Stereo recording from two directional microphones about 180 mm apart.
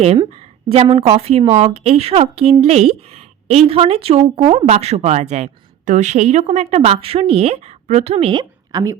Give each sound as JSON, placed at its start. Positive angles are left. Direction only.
{"t": 0.0, "sound": "a woman's voice", "side_deg": -30}